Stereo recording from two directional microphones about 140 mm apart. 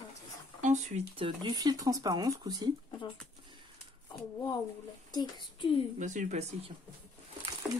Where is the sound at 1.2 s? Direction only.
30° right (ahead or behind).